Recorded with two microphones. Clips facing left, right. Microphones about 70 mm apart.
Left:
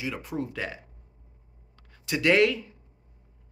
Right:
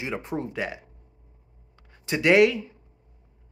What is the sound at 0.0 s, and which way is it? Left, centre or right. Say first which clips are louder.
Speech: right 2 dB; right.